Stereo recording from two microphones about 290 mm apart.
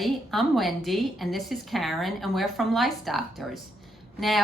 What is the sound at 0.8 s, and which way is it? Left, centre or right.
A woman's voice, centre.